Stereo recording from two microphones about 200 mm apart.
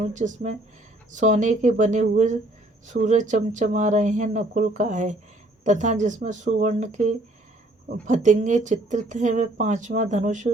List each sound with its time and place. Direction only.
0.0 s a woman's voice: 40° right (ahead or behind)